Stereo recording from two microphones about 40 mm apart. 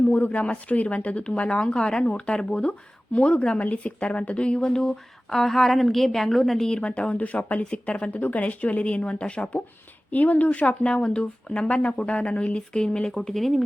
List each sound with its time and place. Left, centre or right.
0.1 s speech: left
3.6 s speech: left; by 6.7 s centre
6.7 s speech: left
7.2 s speech: left
10.1 s speech: left; by 13.6 s centre